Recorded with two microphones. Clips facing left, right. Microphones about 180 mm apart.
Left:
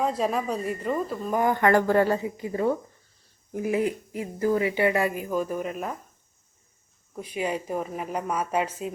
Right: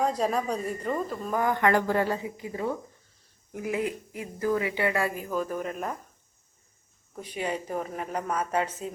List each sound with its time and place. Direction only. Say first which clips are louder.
0.0 s speech: left 1 dB; centre (ahead or behind)
1.3 s a woman's voice: left 3 dB; 20° left (ahead or behind)
1.5 s speech: left 4 dB; 45° left (ahead or behind)
3.5 s a woman's voice: left 4 dB; 25° left (ahead or behind); by 5.7 s 10° left (ahead or behind)
7.2 s a woman's voice: left 3 dB; 10° left (ahead or behind)